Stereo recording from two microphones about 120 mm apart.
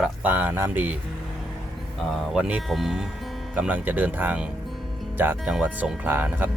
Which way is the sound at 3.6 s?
15° right (ahead or behind).